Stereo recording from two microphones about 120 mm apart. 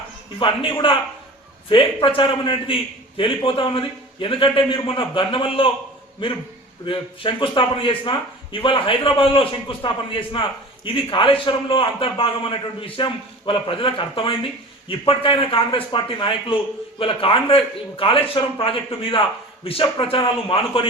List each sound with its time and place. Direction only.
0.3 s a man's voice: 45° left (ahead or behind)
6.8 s a man's voice: 45° left (ahead or behind)